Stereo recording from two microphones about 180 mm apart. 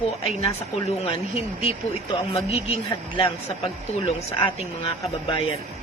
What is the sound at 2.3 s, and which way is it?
A man's voice, 35° left (ahead or behind).